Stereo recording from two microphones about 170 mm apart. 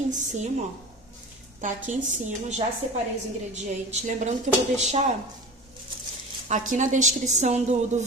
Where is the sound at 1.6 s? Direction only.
45° right (ahead or behind).